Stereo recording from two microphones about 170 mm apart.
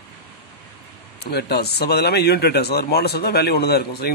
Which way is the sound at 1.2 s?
70° left (ahead or behind).